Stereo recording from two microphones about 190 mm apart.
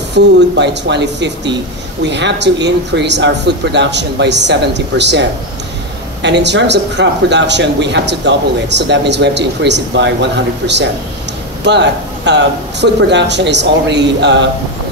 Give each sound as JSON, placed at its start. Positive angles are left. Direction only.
{"t": 0.1, "sound": "speech", "side_deg": -65}
{"t": 6.2, "sound": "speech", "side_deg": -65}
{"t": 11.6, "sound": "speech", "side_deg": -65}